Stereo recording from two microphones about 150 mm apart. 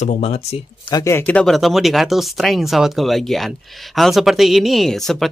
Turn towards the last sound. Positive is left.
turn(degrees=5)  # may be behind; listen again after turning